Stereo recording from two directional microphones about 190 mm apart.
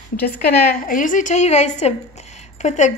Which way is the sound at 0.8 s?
45° left (ahead or behind).